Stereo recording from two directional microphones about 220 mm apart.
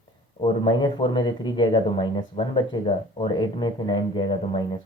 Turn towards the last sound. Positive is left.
turn(degrees=20)  # may be behind; listen again after turning